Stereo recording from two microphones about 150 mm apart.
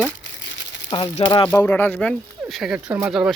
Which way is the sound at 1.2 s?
35° left (ahead or behind).